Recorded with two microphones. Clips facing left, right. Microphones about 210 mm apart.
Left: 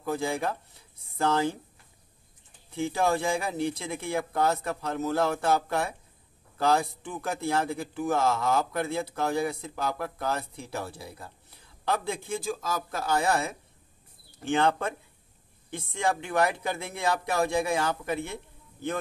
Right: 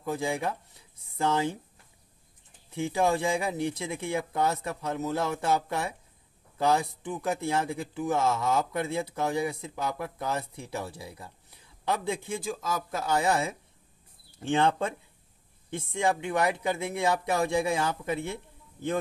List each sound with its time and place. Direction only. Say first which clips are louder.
0.0 s speech: left 1 dB; 20° right (ahead or behind)
2.7 s speech: even; 15° right (ahead or behind)